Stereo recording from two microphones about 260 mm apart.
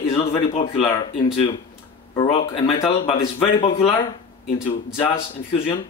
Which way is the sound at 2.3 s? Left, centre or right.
Left.